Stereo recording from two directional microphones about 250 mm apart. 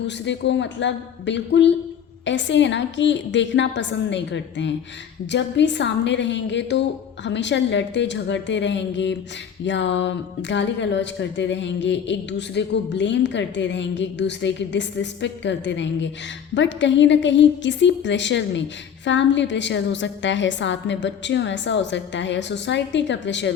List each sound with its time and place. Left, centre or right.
0.0 s speech: left